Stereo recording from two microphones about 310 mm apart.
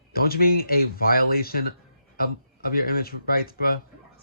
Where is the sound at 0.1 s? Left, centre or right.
Left.